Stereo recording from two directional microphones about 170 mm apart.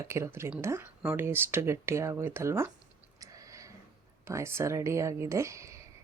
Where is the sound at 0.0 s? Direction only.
15° right (ahead or behind).